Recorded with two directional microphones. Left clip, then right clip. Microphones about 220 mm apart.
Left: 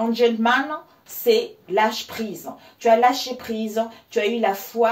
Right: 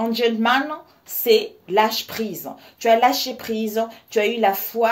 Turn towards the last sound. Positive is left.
turn(degrees=-50)  # may be behind; listen again after turning